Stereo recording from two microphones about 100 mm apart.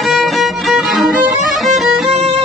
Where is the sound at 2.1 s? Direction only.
90° right.